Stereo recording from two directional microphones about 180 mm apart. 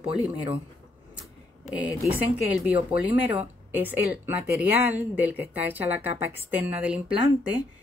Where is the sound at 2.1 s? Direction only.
10° right (ahead or behind).